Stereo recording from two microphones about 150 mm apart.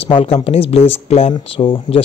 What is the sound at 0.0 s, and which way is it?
Speech, 40° left (ahead or behind).